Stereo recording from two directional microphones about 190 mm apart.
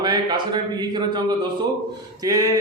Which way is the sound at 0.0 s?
20° right (ahead or behind).